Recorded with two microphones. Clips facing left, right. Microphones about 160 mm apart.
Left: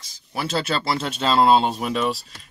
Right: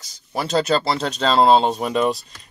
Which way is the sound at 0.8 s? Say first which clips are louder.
Right 2 dB; 35° right (ahead or behind).